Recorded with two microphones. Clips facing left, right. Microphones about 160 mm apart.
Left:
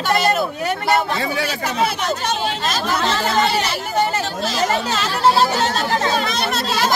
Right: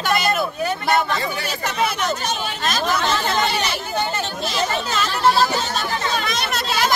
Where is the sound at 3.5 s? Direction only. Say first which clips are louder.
Left 3 dB; 30° left (ahead or behind).